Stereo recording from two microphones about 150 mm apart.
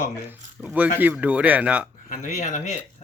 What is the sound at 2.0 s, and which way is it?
Speech, 55° left (ahead or behind).